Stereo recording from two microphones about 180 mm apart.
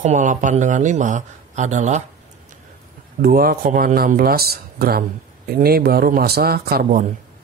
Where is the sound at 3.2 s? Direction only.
55° right (ahead or behind).